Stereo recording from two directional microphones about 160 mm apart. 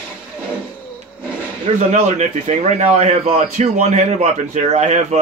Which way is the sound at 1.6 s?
45° right (ahead or behind).